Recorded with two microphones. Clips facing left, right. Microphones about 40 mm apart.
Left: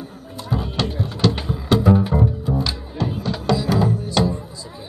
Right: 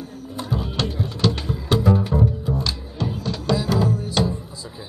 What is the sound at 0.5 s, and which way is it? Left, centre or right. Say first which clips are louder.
Music: left 3 dB; centre.